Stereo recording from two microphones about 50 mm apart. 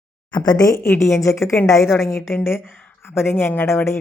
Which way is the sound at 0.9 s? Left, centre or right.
Left.